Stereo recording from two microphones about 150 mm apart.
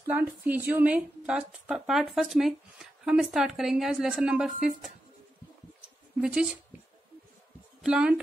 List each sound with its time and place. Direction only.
0.0 s a woman's voice: 15° right (ahead or behind)
6.2 s a woman's voice: 5° right (ahead or behind)
7.8 s a woman's voice: 5° right (ahead or behind)